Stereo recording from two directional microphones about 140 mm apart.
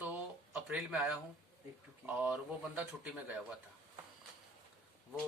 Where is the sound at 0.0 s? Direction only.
10° right (ahead or behind).